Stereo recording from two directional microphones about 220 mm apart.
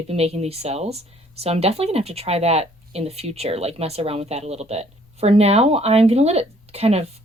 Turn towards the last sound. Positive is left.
turn(degrees=-30)  # may be behind; listen again after turning